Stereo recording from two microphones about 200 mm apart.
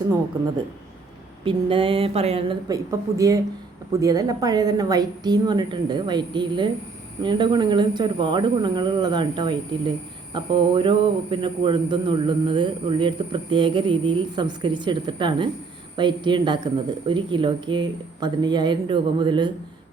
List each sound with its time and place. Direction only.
1.5 s speech: 25° right (ahead or behind)
2.6 s speech: 15° right (ahead or behind)